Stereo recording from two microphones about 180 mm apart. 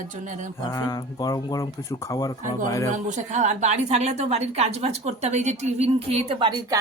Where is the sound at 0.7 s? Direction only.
15° left (ahead or behind).